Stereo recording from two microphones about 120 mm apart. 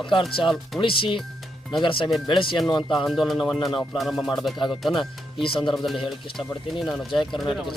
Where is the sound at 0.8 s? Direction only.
45° left (ahead or behind).